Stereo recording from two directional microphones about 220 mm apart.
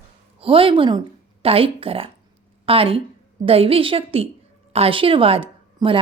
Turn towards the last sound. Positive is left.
turn(degrees=-25)  # may be behind; listen again after turning